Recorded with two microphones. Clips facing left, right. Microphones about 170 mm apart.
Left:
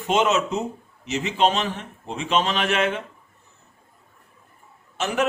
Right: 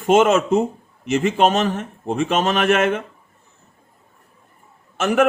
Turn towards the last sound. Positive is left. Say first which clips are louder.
# right 6 dB
turn(degrees=-55)  # may be behind; listen again after turning